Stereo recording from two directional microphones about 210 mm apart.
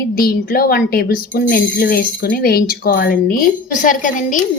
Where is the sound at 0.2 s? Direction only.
45° left (ahead or behind).